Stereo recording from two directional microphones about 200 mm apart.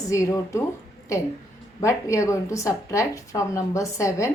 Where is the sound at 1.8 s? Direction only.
15° left (ahead or behind).